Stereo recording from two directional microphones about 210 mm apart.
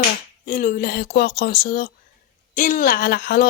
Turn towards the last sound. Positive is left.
turn(degrees=50)  # may be behind; listen again after turning